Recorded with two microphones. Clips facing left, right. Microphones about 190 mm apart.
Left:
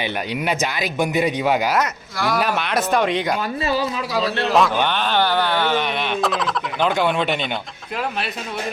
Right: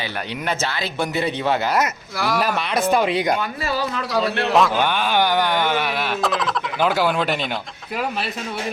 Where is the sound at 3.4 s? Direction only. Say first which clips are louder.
Left 2 dB; 25° left (ahead or behind).